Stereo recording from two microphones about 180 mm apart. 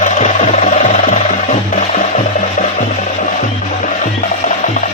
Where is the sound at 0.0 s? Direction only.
40° left (ahead or behind).